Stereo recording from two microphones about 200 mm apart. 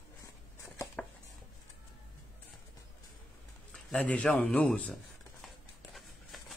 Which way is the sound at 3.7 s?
5° left (ahead or behind).